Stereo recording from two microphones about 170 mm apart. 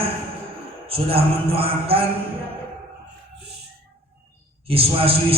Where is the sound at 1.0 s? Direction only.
35° right (ahead or behind).